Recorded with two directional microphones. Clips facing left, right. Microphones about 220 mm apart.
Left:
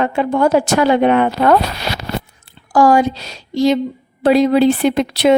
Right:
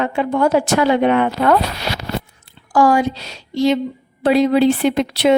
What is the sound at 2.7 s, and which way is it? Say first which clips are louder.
A woman's voice: left 2 dB; 40° left (ahead or behind).